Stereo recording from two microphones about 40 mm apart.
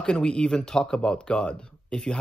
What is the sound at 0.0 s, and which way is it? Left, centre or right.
Speech, left.